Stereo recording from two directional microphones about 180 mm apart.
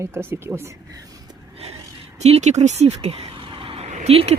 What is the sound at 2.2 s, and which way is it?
Speech, 40° right (ahead or behind).